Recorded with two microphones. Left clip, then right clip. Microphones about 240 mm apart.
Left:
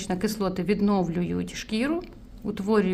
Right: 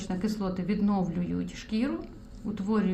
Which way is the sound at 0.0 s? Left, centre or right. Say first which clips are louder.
Left 6 dB; left.